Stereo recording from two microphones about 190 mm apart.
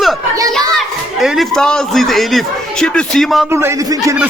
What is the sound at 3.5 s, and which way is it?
Speech, 15° right (ahead or behind).